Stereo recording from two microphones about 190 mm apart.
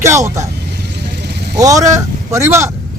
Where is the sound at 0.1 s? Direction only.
15° right (ahead or behind).